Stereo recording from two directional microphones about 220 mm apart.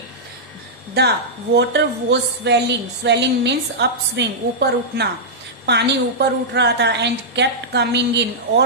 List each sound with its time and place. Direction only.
1.0 s a woman's voice: 45° right (ahead or behind)